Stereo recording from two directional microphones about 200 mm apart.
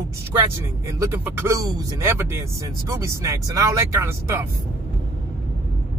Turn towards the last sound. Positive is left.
turn(degrees=-15)  # may be behind; listen again after turning